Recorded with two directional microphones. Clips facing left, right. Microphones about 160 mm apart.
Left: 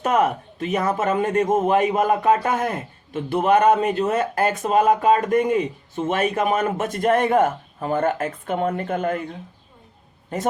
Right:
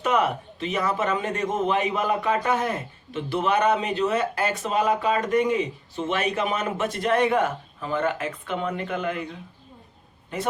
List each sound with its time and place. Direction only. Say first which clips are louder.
0.0 s a man's voice: left 3 dB; 45° left (ahead or behind)
10.3 s a man's voice: left 4 dB; 45° left (ahead or behind)